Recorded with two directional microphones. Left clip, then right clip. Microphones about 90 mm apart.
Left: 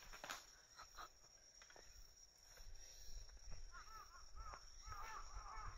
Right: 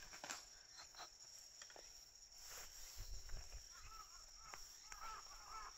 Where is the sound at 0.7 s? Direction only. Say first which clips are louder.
Even; 25° left (ahead or behind).